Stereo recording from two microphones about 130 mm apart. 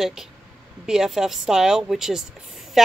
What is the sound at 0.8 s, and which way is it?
Speech, 5° right (ahead or behind).